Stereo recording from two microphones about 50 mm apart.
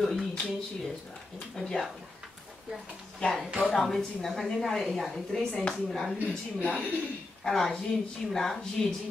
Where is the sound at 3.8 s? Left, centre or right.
Centre.